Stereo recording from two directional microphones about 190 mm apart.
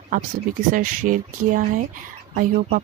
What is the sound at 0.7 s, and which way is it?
Speech, 45° right (ahead or behind).